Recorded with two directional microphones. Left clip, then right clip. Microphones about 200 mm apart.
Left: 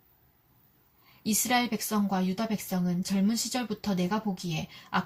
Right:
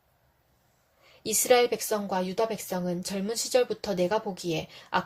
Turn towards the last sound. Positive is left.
turn(degrees=-40)  # may be behind; listen again after turning